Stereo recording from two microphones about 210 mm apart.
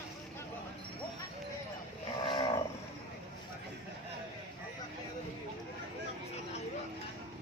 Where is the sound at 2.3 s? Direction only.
20° left (ahead or behind).